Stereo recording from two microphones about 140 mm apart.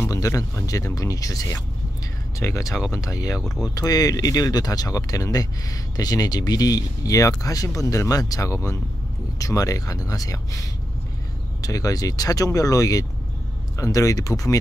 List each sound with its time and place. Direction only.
0.0 s speech: 20° left (ahead or behind)
3.3 s speech: centre (ahead or behind)
3.7 s speech: 25° left (ahead or behind)
11.6 s speech: 25° left (ahead or behind)